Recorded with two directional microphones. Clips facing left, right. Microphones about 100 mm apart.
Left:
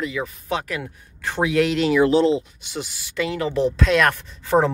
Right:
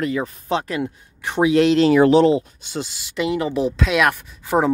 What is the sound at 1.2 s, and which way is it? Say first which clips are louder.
Speech: right 4 dB; 20° right (ahead or behind).